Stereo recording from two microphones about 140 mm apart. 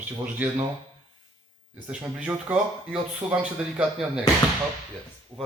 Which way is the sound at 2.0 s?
10° right (ahead or behind).